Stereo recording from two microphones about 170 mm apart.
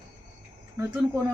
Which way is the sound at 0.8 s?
20° right (ahead or behind).